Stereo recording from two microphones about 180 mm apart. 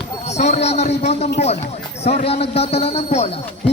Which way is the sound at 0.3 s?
40° left (ahead or behind).